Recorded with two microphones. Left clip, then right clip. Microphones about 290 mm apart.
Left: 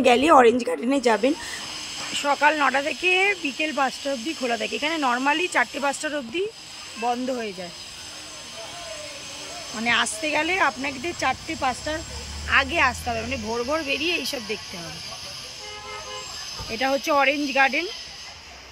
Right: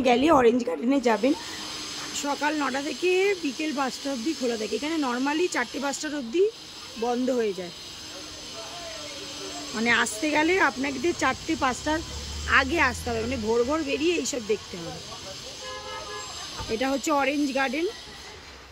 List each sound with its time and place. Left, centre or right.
0.0 s speech: centre
2.2 s speech: centre
9.8 s speech: centre
16.7 s speech: centre